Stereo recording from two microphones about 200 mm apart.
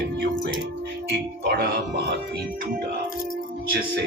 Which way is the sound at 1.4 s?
50° right (ahead or behind).